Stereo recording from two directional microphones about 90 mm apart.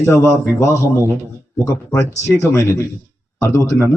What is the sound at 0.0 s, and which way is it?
Mantra, 30° left (ahead or behind).